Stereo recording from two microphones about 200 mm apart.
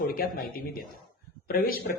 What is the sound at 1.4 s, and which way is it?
Speech, 45° left (ahead or behind).